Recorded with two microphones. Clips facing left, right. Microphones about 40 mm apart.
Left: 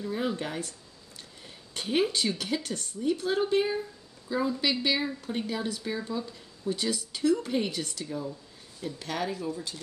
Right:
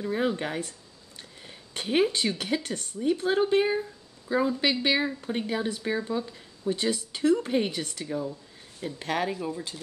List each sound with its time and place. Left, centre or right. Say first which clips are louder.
0.0 s speech: right 3 dB; right
1.5 s a sound: right 2 dB; right
2.1 s speech: right 2 dB; right